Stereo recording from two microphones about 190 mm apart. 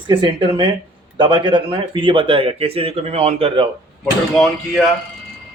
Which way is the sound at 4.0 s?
Centre (ahead or behind).